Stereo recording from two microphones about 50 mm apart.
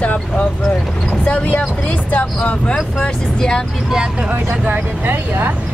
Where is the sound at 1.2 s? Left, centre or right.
Left.